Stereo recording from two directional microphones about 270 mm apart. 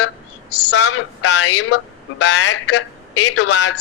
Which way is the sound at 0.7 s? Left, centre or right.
Left.